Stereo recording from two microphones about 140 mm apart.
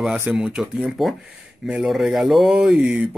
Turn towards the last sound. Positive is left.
turn(degrees=-5)  # may be behind; listen again after turning